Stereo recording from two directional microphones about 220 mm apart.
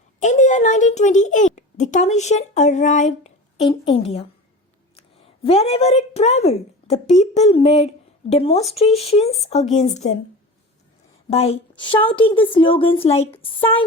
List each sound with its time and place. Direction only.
0.2 s a woman's voice: 35° left (ahead or behind)
11.3 s a woman's voice: 25° left (ahead or behind)